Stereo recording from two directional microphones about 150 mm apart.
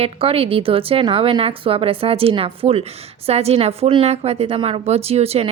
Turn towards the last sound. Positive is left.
turn(degrees=-40)  # may be behind; listen again after turning